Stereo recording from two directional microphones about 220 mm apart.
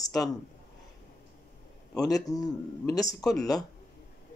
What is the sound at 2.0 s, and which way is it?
Speech, 15° left (ahead or behind).